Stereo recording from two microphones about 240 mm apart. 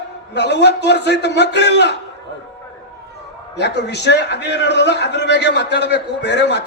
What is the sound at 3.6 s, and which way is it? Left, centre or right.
A man's voice, left.